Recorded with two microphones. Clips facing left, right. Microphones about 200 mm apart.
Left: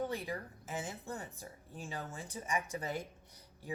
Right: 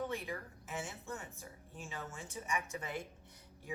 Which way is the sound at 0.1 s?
35° left (ahead or behind).